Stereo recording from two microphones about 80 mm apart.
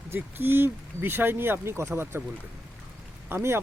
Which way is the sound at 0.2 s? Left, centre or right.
Right.